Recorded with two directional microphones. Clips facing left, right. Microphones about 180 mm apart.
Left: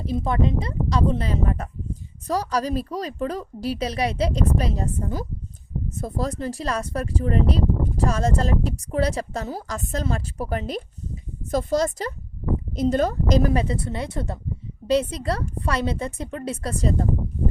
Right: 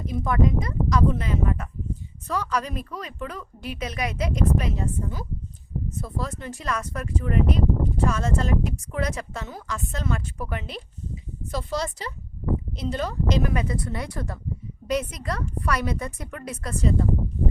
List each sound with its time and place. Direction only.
0.0 s a woman's voice: 30° left (ahead or behind)